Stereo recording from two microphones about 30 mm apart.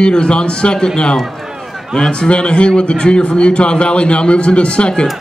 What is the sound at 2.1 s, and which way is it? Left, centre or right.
A man's voice, left.